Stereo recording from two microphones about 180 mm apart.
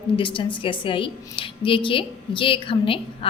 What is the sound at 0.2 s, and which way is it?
A woman's voice, 30° left (ahead or behind).